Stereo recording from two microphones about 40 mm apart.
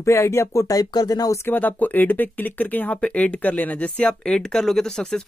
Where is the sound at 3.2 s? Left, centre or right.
Left.